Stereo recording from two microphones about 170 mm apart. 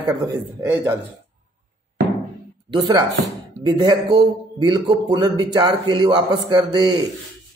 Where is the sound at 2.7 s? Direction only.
25° right (ahead or behind).